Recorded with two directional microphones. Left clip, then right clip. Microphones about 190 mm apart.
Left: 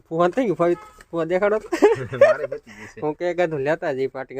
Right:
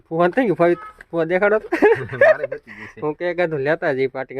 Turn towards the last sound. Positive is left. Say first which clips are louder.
# right 4 dB
turn(degrees=-15)  # may be behind; listen again after turning